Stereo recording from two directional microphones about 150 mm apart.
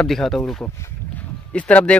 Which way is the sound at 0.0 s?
Centre (ahead or behind).